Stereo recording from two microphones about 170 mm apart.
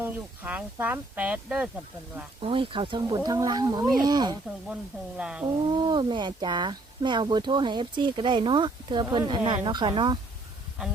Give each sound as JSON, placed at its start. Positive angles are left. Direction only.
{"t": 0.0, "sound": "speech", "side_deg": -10}
{"t": 2.4, "sound": "speech", "side_deg": -30}
{"t": 4.7, "sound": "speech", "side_deg": -5}
{"t": 5.6, "sound": "speech", "side_deg": -25}